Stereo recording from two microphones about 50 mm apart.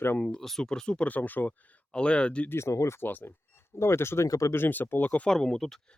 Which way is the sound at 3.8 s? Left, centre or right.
Left.